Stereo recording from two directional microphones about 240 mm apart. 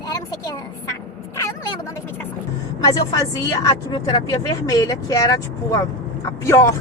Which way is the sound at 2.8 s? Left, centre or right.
Centre.